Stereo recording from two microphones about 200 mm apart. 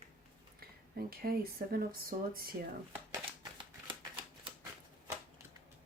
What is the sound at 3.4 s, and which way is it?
Shuffling cards, 25° right (ahead or behind).